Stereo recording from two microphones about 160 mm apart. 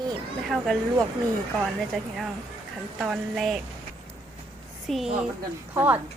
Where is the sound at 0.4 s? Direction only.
Centre (ahead or behind).